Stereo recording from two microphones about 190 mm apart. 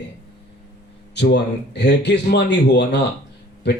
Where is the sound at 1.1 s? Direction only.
65° left (ahead or behind).